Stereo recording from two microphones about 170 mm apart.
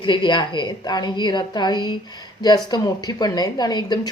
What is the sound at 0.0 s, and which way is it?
Speech, 25° left (ahead or behind).